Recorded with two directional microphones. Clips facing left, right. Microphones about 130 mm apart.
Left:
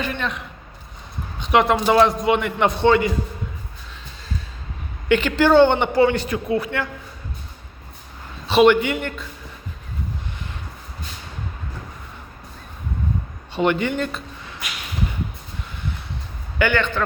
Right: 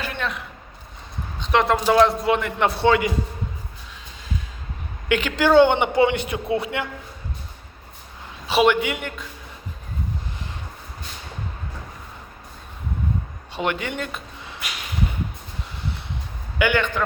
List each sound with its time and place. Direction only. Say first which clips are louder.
0.0 s a sound: left 2 dB; 5° right (ahead or behind)
1.5 s a man's voice: left 2 dB; 5° left (ahead or behind)
5.0 s a woman's voice: left 3 dB; 5° right (ahead or behind)
5.9 s a man's voice: left 2 dB; 20° right (ahead or behind)
8.4 s a man's voice: left 4 dB; 5° right (ahead or behind)
13.6 s a man's voice: left 5 dB; centre (ahead or behind)
16.6 s a woman's voice: left 1 dB; 10° right (ahead or behind)